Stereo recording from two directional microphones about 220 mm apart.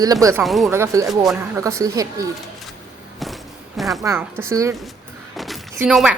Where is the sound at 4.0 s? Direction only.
10° right (ahead or behind).